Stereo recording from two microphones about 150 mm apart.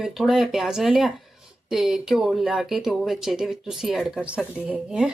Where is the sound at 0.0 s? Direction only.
Centre (ahead or behind).